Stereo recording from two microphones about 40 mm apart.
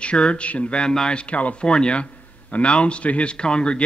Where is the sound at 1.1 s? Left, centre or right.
Left.